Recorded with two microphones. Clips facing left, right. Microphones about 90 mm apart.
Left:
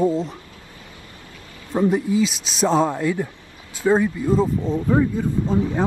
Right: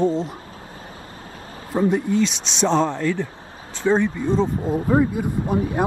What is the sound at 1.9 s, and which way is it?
A man's voice, 5° left (ahead or behind).